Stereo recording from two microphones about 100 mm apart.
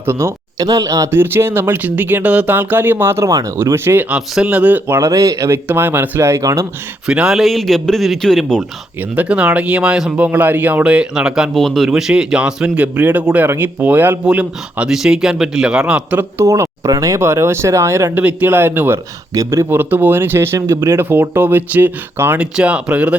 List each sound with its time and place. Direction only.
0.0 s speech: 25° right (ahead or behind)
0.6 s speech: 40° right (ahead or behind)
4.1 s speech: 10° right (ahead or behind)
4.9 s speech: 35° right (ahead or behind)
5.6 s speech: 20° right (ahead or behind)
7.1 s a man's voice: 5° right (ahead or behind)
9.0 s speech: 15° right (ahead or behind)
16.4 s speech: 30° right (ahead or behind)
19.3 s speech: 30° right (ahead or behind); by 23.1 s 10° right (ahead or behind)